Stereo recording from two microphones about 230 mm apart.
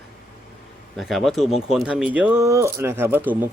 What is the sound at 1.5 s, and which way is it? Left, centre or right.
Speech, left.